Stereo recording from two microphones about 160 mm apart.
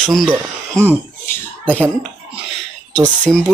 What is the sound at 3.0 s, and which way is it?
Speech, 10° left (ahead or behind).